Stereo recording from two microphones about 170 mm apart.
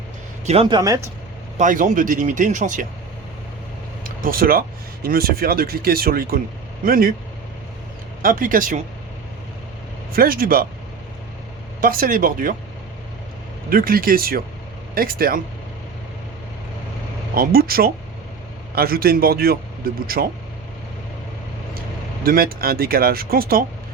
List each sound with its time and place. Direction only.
0.4 s speech: 35° right (ahead or behind)
1.5 s speech: 50° right (ahead or behind)
4.0 s speech: 55° right (ahead or behind)
8.2 s speech: 55° right (ahead or behind)
10.1 s speech: 60° right (ahead or behind)
11.8 s speech: 55° right (ahead or behind)
13.7 s speech: 55° right (ahead or behind)
17.3 s speech: 60° right (ahead or behind)
21.8 s speech: 60° right (ahead or behind)